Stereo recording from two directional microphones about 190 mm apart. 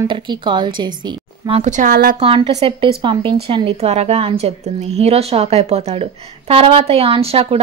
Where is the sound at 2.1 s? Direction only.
30° right (ahead or behind).